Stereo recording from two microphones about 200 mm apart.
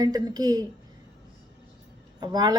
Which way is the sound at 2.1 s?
20° right (ahead or behind).